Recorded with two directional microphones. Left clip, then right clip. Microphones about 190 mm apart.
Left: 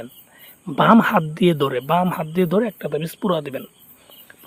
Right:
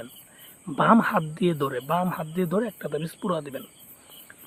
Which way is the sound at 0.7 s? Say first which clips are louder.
Left 5 dB; 40° left (ahead or behind).